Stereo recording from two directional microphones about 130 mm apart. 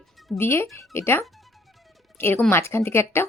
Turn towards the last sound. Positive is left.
turn(degrees=20)  # may be behind; listen again after turning